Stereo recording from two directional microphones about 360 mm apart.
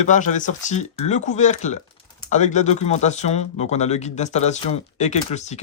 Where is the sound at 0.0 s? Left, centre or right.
Centre.